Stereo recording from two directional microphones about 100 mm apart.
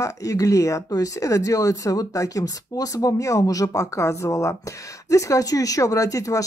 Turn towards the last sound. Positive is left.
turn(degrees=35)  # may be behind; listen again after turning